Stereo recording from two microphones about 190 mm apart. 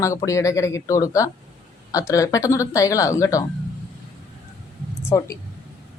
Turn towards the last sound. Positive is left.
turn(degrees=15)  # may be behind; listen again after turning